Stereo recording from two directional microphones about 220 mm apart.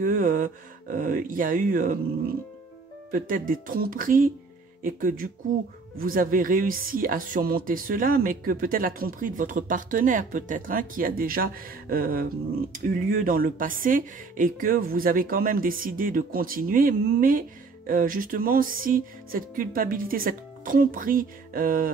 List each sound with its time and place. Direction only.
0.0 s speech: 40° right (ahead or behind)
3.1 s speech: 40° right (ahead or behind)